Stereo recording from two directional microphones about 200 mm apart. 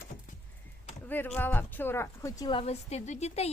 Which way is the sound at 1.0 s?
10° left (ahead or behind).